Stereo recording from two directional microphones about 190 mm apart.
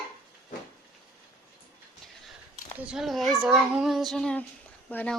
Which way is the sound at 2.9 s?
Centre (ahead or behind).